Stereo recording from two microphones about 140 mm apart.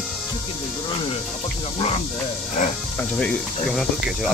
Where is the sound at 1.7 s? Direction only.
50° left (ahead or behind).